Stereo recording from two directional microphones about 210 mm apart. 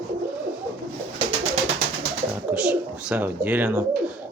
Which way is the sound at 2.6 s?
5° right (ahead or behind).